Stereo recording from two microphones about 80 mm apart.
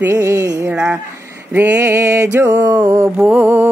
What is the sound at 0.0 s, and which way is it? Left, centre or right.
Mantra, right.